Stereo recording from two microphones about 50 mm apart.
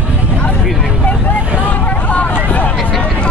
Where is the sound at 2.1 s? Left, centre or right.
Left.